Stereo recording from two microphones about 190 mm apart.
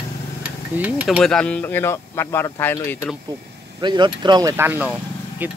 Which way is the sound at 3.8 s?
25° right (ahead or behind).